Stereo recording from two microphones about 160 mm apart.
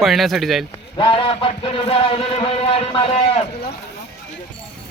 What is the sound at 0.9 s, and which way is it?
Speech, 35° left (ahead or behind).